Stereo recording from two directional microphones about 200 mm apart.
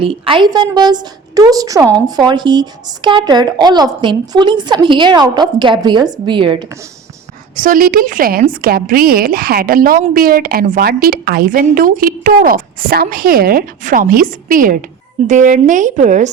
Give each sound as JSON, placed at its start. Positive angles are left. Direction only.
{"t": 0.0, "sound": "speech", "side_deg": -25}
{"t": 7.5, "sound": "a woman's voice", "side_deg": -45}